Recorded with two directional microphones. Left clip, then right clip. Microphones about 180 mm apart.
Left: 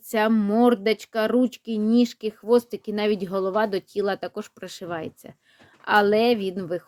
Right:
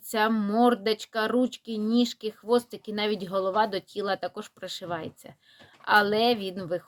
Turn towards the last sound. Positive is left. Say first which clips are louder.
# left 4 dB
turn(degrees=45)  # may be behind; listen again after turning